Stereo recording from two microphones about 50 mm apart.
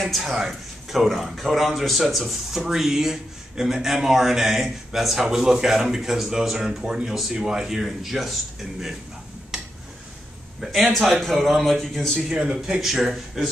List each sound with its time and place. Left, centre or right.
0.0 s speech: centre
10.7 s speech: centre
12.3 s speech: centre
12.8 s speech: centre